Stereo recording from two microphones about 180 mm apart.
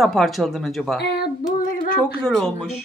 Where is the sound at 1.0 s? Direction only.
65° left (ahead or behind).